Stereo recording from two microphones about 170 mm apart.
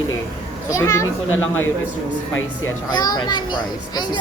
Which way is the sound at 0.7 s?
20° left (ahead or behind).